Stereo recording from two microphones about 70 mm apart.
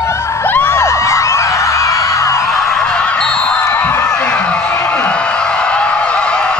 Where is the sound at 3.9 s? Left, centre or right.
Left.